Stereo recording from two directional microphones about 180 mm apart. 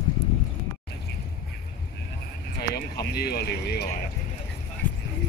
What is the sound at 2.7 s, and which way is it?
Speech, 60° left (ahead or behind).